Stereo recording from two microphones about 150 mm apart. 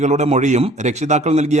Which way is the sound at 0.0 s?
50° right (ahead or behind).